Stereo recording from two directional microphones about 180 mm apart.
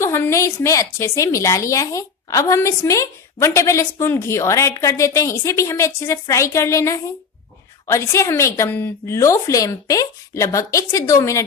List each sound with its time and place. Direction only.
0.0 s a woman's voice: 15° left (ahead or behind)